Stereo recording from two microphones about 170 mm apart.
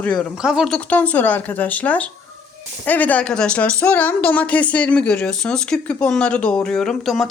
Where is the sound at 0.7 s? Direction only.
10° left (ahead or behind).